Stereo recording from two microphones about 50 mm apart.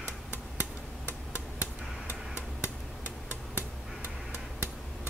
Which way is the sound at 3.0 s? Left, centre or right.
Left.